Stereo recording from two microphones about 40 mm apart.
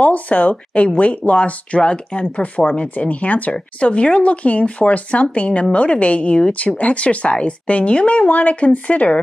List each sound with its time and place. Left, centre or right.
0.0 s speech: left